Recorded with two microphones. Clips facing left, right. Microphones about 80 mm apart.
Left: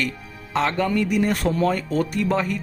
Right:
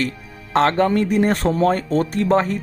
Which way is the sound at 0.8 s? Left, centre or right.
Right.